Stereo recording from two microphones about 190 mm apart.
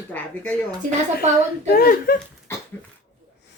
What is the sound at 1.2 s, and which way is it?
Speech, 35° right (ahead or behind).